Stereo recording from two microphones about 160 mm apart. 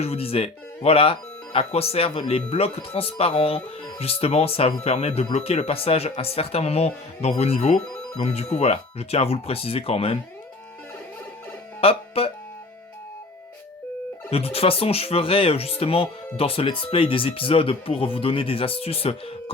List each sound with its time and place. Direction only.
0.0 s speech: 40° left (ahead or behind)
11.8 s speech: 35° left (ahead or behind)
14.3 s speech: 40° left (ahead or behind)